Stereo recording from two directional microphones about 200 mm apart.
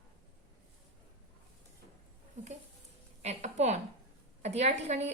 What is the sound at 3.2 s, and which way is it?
Speech, 35° right (ahead or behind).